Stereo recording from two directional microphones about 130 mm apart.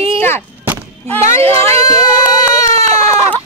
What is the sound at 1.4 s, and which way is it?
Speech, 20° left (ahead or behind).